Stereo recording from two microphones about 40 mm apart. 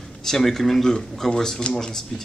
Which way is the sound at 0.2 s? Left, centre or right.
Centre.